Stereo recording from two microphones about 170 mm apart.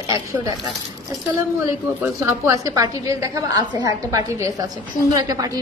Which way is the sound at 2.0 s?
15° right (ahead or behind).